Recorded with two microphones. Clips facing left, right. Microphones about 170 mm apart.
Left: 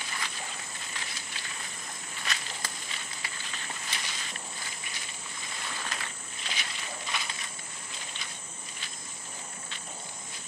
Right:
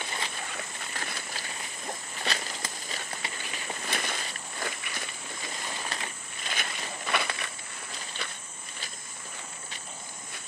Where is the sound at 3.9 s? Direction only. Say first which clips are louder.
Right 6 dB; 55° right (ahead or behind).